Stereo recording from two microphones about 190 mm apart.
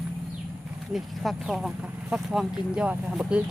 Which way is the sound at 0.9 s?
Centre (ahead or behind).